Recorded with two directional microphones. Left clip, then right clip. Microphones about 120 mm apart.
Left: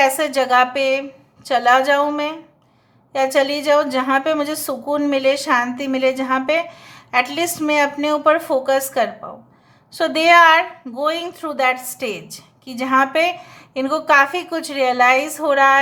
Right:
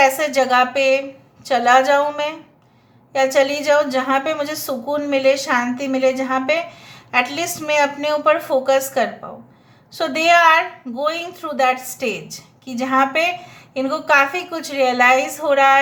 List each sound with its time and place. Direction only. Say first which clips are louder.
0.0 s a woman's voice: right 1 dB; 30° left (ahead or behind)